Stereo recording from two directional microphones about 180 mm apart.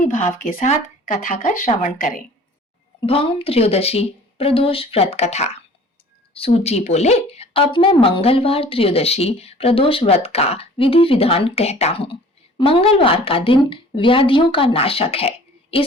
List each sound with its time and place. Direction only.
0.0 s speech: 45° left (ahead or behind)
3.1 s speech: 30° left (ahead or behind)